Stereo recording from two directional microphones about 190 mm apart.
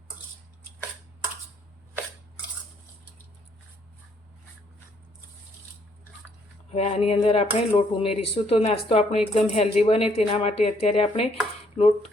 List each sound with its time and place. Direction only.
6.7 s speech: 30° left (ahead or behind)